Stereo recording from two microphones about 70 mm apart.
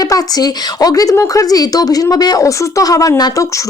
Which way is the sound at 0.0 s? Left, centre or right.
Left.